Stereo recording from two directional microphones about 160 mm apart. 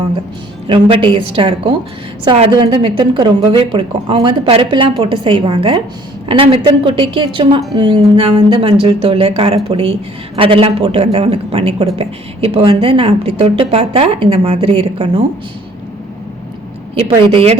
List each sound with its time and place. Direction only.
0.7 s a woman's voice: 35° right (ahead or behind)
17.2 s a woman's voice: 40° right (ahead or behind)